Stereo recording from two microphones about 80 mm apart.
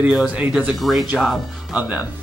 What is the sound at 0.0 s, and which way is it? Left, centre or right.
Speech, centre.